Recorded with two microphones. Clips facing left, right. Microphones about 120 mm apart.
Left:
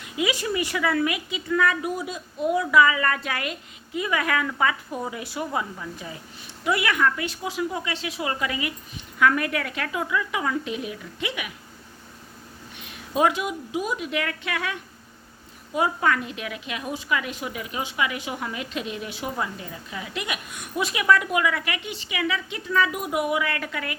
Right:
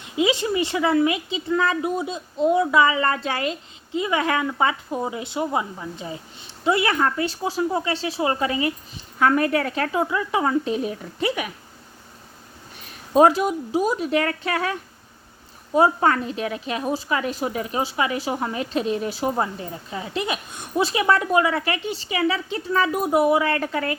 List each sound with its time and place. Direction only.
0.0 s a woman's voice: 25° right (ahead or behind)
12.8 s a woman's voice: 40° right (ahead or behind)